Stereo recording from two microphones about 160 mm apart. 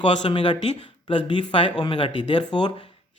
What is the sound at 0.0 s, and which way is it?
Speech, 30° left (ahead or behind).